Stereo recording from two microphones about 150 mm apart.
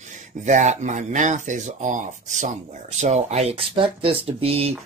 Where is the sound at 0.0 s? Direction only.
55° right (ahead or behind).